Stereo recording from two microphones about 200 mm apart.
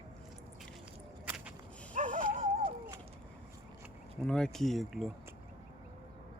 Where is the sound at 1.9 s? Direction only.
40° right (ahead or behind).